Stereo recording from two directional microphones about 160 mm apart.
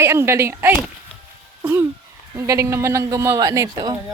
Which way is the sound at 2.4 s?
15° right (ahead or behind).